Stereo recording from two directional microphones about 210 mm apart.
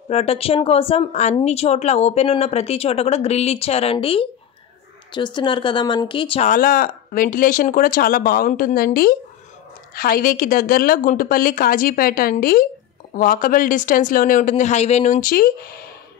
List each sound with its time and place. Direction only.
0.1 s speech: 30° left (ahead or behind)
6.5 s a woman's voice: 45° left (ahead or behind)